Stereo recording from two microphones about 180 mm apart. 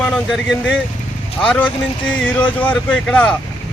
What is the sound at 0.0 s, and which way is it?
A man's voice, centre (ahead or behind).